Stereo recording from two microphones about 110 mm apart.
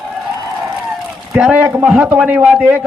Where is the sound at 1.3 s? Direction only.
10° right (ahead or behind).